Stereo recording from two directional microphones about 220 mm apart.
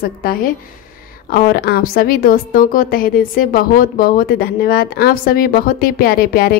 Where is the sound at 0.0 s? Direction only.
40° left (ahead or behind).